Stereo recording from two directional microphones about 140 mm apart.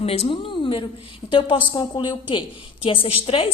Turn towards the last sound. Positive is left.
turn(degrees=40)  # may be behind; listen again after turning